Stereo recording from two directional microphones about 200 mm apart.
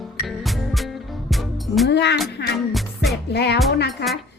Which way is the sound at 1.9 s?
60° left (ahead or behind).